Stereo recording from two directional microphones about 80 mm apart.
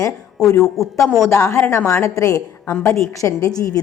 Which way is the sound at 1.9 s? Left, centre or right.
Left.